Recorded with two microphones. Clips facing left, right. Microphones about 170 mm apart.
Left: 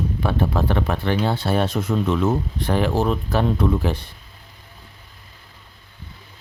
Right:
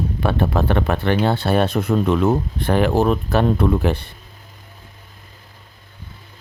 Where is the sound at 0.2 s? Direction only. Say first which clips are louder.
Right 3 dB; 65° right (ahead or behind).